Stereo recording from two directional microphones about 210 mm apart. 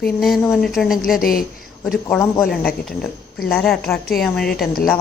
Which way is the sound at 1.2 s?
45° left (ahead or behind).